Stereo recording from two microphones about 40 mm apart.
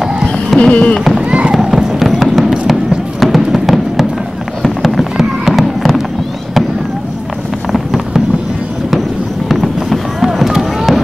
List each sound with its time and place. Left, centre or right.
0.6 s a sound: left
1.5 s a sound: centre
4.6 s run: centre
5.1 s fireworks: centre
9.5 s fireworks: centre
10.2 s fireworks: centre